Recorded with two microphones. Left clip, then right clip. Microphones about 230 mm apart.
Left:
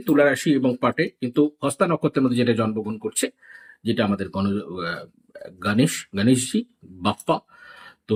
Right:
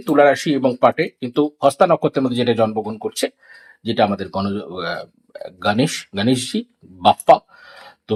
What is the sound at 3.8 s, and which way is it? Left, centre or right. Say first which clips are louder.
Speech: right 6 dB; centre.